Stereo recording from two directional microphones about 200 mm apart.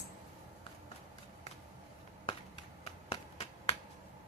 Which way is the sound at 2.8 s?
30° left (ahead or behind).